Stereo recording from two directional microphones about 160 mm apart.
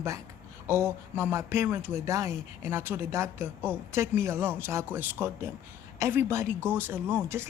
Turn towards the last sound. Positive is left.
turn(degrees=-15)  # may be behind; listen again after turning